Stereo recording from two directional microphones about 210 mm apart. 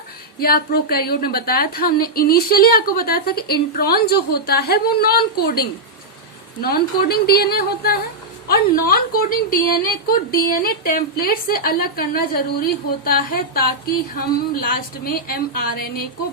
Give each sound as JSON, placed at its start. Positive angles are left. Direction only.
{"t": 0.3, "sound": "a woman's voice", "side_deg": 45}
{"t": 6.6, "sound": "a woman's voice", "side_deg": 45}